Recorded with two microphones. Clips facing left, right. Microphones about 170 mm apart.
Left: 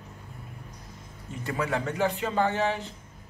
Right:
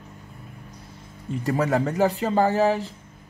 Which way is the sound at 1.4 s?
40° right (ahead or behind).